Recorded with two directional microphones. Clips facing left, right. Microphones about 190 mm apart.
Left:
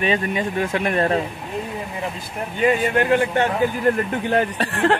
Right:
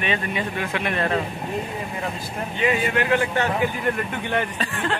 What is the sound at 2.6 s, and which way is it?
Speech, 45° left (ahead or behind).